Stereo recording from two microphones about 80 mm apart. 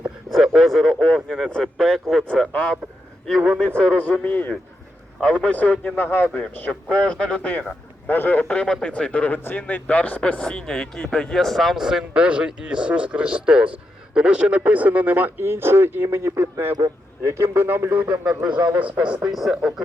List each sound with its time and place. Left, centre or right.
0.0 s a man's voice: centre
3.2 s speech: centre
3.8 s a man's voice: centre